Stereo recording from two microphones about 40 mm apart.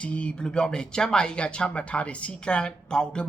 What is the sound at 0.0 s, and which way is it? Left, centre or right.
Speech, left.